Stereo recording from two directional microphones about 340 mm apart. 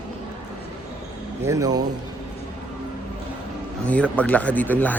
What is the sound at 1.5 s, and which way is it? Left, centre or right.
Speech, centre.